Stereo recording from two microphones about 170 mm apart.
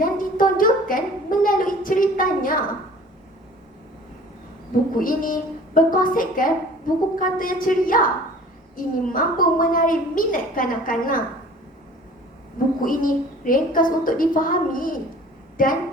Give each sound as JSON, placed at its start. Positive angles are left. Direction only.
{"t": 0.0, "sound": "a sound", "side_deg": 55}
{"t": 4.9, "sound": "a woman's voice", "side_deg": 55}
{"t": 12.8, "sound": "a woman's voice", "side_deg": 55}